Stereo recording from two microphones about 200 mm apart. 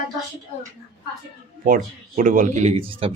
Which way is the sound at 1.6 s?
40° right (ahead or behind).